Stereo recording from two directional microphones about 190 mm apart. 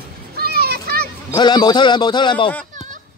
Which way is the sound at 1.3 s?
25° left (ahead or behind).